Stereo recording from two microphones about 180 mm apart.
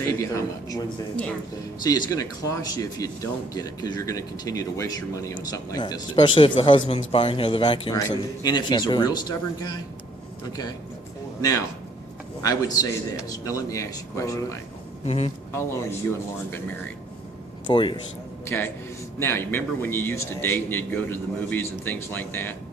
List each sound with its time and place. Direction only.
0.0 s a man's voice: 15° left (ahead or behind)
11.3 s a man's voice: 20° left (ahead or behind)
15.0 s a man's voice: 35° left (ahead or behind)
17.7 s a man's voice: 25° left (ahead or behind)
18.4 s speech: 10° left (ahead or behind)